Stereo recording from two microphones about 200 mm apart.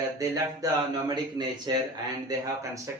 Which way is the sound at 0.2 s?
15° right (ahead or behind).